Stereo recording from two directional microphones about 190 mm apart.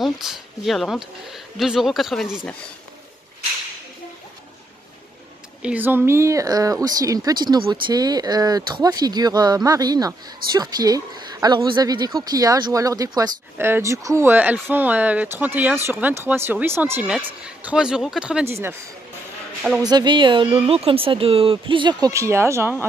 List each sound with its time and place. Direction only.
0.0 s speech: centre (ahead or behind)
5.6 s speech: 10° right (ahead or behind)
19.8 s speech: 20° right (ahead or behind)